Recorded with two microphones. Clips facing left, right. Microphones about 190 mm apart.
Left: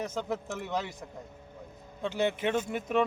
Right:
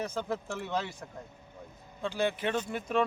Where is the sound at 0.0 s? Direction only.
20° left (ahead or behind).